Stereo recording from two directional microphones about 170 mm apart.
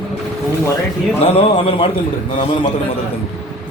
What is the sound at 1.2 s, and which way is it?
Speech, 35° left (ahead or behind).